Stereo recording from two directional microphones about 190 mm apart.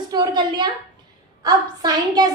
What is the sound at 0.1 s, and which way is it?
A woman's voice, 20° right (ahead or behind).